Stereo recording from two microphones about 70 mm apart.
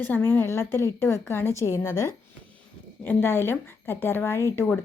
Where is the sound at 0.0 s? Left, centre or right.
Left.